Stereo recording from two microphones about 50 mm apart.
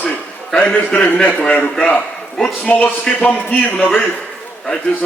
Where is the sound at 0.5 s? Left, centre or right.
Left.